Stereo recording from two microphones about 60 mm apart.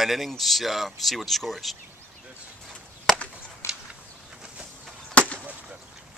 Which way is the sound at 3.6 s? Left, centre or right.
Left.